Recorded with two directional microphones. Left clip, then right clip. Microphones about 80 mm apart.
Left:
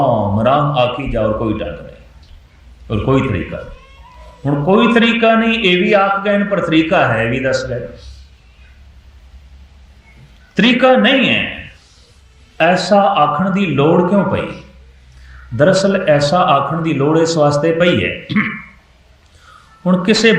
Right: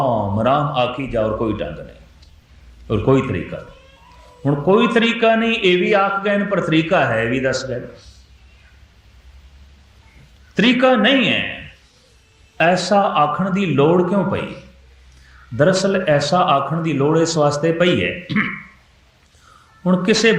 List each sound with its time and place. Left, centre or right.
0.0 s a man's voice: right
2.8 s a man's voice: right
4.4 s a man's voice: right
10.5 s a man's voice: right
12.5 s a man's voice: right
15.5 s a man's voice: right
19.8 s a man's voice: right